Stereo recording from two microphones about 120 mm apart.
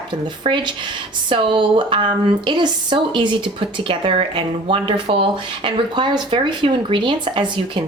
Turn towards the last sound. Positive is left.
turn(degrees=-40)  # may be behind; listen again after turning